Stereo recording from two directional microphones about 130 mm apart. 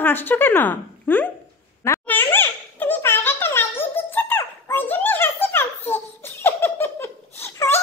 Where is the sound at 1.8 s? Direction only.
20° left (ahead or behind).